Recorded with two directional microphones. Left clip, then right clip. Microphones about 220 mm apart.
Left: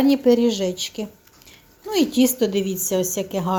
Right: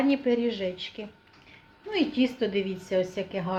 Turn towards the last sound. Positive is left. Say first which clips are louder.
# left 7 dB
turn(degrees=40)  # may be behind; listen again after turning